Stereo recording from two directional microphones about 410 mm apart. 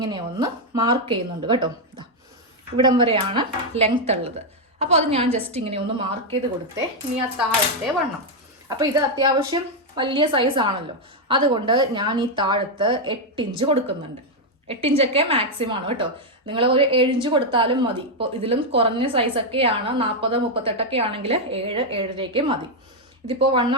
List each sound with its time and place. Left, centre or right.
0.0 s a woman's voice: centre
8.8 s a woman's voice: centre